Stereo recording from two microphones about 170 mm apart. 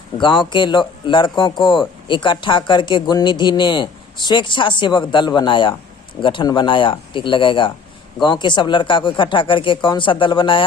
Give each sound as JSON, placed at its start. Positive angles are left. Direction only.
{"t": 0.2, "sound": "speech", "side_deg": 25}